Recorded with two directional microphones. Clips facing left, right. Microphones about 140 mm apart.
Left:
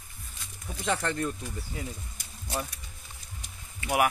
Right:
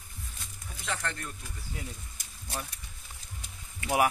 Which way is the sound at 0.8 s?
30° left (ahead or behind).